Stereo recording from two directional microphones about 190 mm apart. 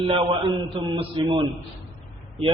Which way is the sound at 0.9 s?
25° right (ahead or behind).